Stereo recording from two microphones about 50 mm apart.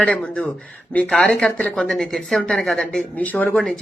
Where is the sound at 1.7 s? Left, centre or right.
Centre.